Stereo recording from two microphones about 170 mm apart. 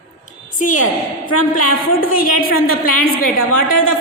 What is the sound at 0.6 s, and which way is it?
A woman's voice, 50° left (ahead or behind).